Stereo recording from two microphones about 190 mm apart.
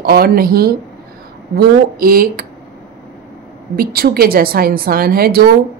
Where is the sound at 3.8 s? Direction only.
55° right (ahead or behind).